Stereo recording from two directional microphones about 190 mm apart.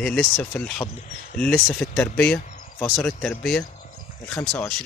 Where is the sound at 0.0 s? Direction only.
5° left (ahead or behind).